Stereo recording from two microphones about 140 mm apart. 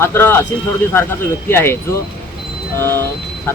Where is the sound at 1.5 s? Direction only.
15° left (ahead or behind).